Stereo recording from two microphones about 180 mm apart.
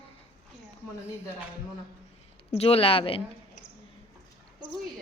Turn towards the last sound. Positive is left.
turn(degrees=30)  # may be behind; listen again after turning